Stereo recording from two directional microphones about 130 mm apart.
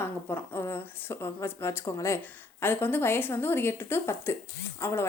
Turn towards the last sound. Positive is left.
turn(degrees=20)  # may be behind; listen again after turning